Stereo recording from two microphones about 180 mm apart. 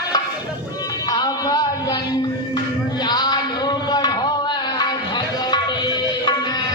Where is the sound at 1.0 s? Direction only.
20° left (ahead or behind).